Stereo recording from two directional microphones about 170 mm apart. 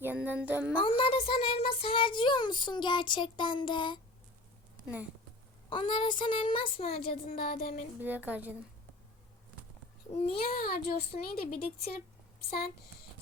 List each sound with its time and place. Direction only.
0.0 s child singing: 10° right (ahead or behind)
0.8 s child singing: 30° left (ahead or behind)
5.6 s child singing: 30° left (ahead or behind)
7.3 s a sound: 60° left (ahead or behind)
8.0 s a woman's voice: 10° right (ahead or behind)
10.1 s a child's voice: 35° left (ahead or behind)
10.5 s a sound: 55° left (ahead or behind)
11.1 s a woman's voice: 45° left (ahead or behind)
11.5 s a sound: 60° left (ahead or behind)